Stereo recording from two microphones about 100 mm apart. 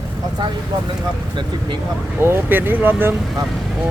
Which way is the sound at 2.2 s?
20° right (ahead or behind).